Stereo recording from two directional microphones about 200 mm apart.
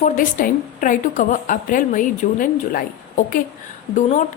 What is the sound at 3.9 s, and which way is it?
Speech, 40° left (ahead or behind).